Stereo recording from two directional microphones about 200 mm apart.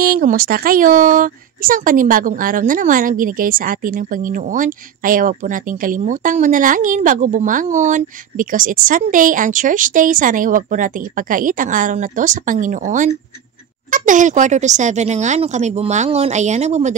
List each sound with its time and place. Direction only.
0.0 s speech: 45° right (ahead or behind)